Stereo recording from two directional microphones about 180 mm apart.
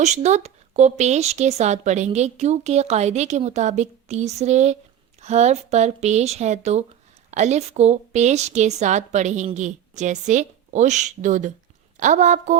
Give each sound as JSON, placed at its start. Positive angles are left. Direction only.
{"t": 0.0, "sound": "a woman's voice", "side_deg": -40}